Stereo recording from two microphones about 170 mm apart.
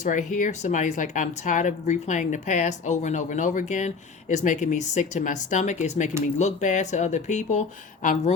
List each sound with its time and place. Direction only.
0.0 s speech: 45° left (ahead or behind)